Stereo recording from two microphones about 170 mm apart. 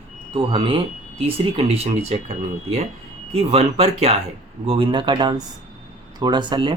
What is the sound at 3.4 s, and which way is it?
Speech, 35° right (ahead or behind).